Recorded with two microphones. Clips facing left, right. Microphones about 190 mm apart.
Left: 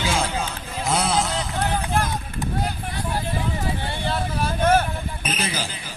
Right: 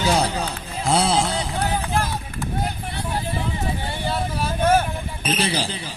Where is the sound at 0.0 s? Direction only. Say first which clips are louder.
Right 3 dB; 40° right (ahead or behind).